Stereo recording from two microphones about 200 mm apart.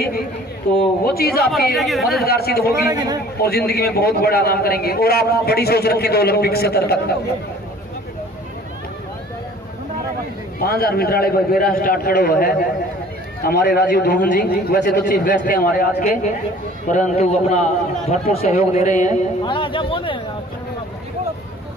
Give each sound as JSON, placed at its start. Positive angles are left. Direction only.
{"t": 1.0, "sound": "a man's voice", "side_deg": 50}
{"t": 1.8, "sound": "speech", "side_deg": 0}
{"t": 2.2, "sound": "a man's voice", "side_deg": 50}
{"t": 2.9, "sound": "a man's voice", "side_deg": -20}
{"t": 3.3, "sound": "a man's voice", "side_deg": 50}
{"t": 10.6, "sound": "a man's voice", "side_deg": 50}
{"t": 18.4, "sound": "a man's voice", "side_deg": 45}
{"t": 19.4, "sound": "a man's voice", "side_deg": 25}